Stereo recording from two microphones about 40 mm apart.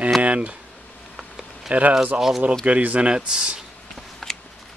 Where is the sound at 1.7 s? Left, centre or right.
Right.